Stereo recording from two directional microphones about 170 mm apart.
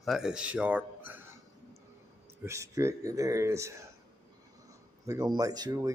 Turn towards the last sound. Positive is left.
turn(degrees=-20)  # may be behind; listen again after turning